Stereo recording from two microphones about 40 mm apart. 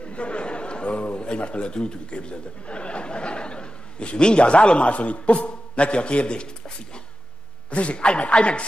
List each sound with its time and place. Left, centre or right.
0.0 s chatter: left
1.2 s speech: left